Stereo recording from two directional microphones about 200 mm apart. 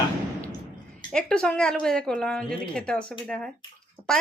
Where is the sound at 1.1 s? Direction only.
5° left (ahead or behind).